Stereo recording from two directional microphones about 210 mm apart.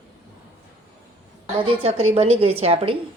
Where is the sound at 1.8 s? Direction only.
30° right (ahead or behind).